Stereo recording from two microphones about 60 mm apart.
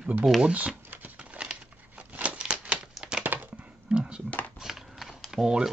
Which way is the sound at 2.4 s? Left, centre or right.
Centre.